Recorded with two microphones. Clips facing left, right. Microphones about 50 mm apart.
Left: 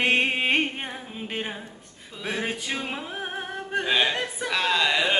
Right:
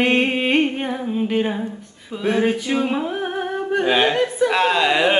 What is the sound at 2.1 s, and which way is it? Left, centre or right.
Speech, centre.